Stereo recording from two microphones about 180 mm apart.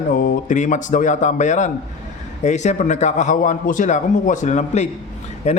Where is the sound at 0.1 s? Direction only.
50° left (ahead or behind).